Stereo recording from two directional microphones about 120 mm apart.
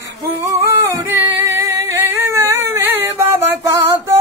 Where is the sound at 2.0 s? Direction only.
25° right (ahead or behind).